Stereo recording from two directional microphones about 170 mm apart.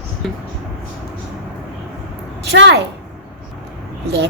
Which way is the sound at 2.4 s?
85° right.